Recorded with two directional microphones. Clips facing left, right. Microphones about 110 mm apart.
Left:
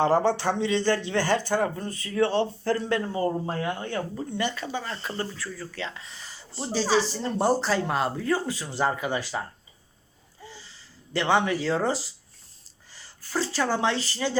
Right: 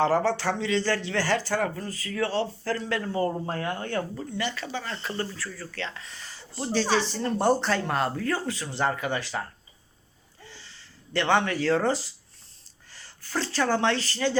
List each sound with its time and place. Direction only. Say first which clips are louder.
0.0 s speech: left 1 dB; 20° left (ahead or behind)
11.1 s speech: left 1 dB; 10° left (ahead or behind)
13.3 s speech: even; 10° left (ahead or behind)